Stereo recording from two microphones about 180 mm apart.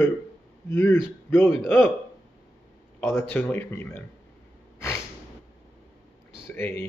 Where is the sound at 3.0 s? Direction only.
15° left (ahead or behind).